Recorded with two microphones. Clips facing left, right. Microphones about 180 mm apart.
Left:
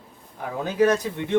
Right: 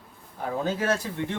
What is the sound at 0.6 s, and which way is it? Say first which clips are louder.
Speech: left 8 dB; 15° left (ahead or behind).